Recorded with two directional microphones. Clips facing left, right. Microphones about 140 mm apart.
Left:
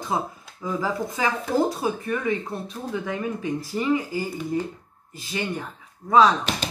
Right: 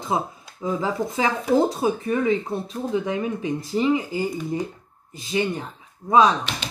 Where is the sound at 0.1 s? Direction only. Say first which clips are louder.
Right 2 dB; 20° right (ahead or behind).